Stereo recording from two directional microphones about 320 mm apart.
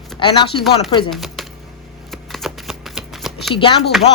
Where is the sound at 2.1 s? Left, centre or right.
Centre.